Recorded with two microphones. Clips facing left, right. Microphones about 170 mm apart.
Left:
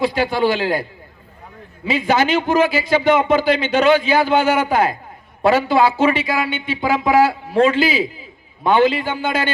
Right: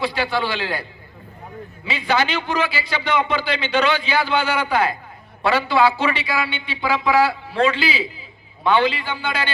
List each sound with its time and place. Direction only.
0.0 s a man's voice: 45° left (ahead or behind)